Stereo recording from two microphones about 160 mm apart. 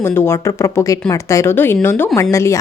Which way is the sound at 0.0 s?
15° left (ahead or behind).